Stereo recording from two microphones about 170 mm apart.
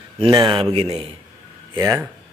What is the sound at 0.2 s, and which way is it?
Speech, 30° right (ahead or behind).